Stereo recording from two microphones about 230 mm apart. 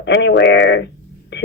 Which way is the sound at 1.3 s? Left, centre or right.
Left.